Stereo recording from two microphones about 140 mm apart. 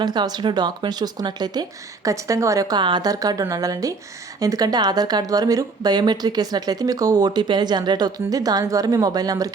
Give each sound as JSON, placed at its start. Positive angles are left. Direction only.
{"t": 0.0, "sound": "speech", "side_deg": -30}